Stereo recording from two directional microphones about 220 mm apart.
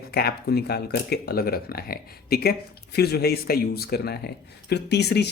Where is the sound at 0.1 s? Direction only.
45° left (ahead or behind).